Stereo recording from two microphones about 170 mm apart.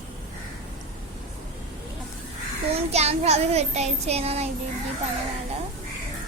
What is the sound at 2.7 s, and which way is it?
A child's voice, 40° right (ahead or behind).